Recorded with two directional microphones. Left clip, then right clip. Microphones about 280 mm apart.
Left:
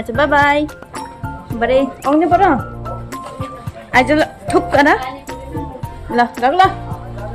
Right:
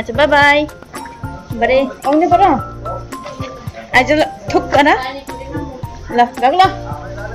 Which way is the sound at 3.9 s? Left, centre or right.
Centre.